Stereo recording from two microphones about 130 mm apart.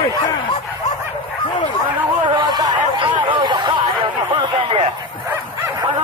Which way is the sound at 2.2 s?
35° right (ahead or behind).